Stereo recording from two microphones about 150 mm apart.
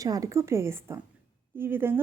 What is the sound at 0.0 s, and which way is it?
A woman's voice, 25° right (ahead or behind).